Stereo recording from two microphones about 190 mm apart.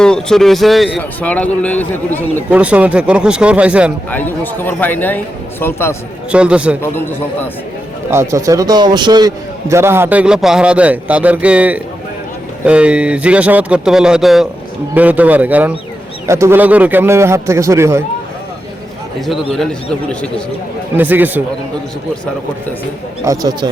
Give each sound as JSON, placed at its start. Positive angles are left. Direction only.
{"t": 0.0, "sound": "a man's voice", "side_deg": 5}
{"t": 2.5, "sound": "a man's voice", "side_deg": -5}
{"t": 4.1, "sound": "a man's voice", "side_deg": 10}
{"t": 6.3, "sound": "a man's voice", "side_deg": -5}
{"t": 6.8, "sound": "a man's voice", "side_deg": 10}
{"t": 8.1, "sound": "a man's voice", "side_deg": -15}
{"t": 19.2, "sound": "a man's voice", "side_deg": 0}
{"t": 20.9, "sound": "a man's voice", "side_deg": -10}
{"t": 23.2, "sound": "speech", "side_deg": -20}